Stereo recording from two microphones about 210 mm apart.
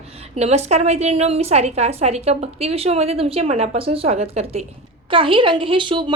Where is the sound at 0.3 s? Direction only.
30° right (ahead or behind).